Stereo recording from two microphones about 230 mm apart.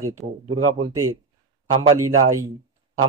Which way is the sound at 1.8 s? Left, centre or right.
Centre.